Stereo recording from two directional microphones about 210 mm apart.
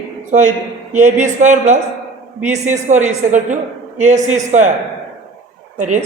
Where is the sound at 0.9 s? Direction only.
35° right (ahead or behind).